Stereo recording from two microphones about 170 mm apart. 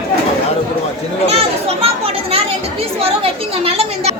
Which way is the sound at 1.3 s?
35° right (ahead or behind).